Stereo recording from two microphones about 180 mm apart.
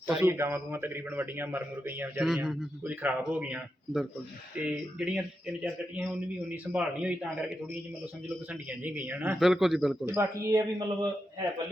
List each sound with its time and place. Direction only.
0.1 s a man's voice: 10° right (ahead or behind)
8.8 s a man's voice: 10° right (ahead or behind)
10.2 s a man's voice: 20° right (ahead or behind)